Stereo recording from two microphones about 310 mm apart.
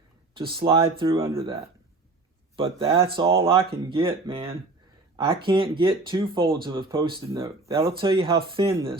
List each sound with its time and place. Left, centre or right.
0.3 s speech: centre
2.6 s speech: centre